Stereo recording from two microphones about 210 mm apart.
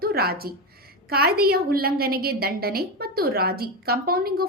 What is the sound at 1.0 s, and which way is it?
A woman's voice, 45° right (ahead or behind).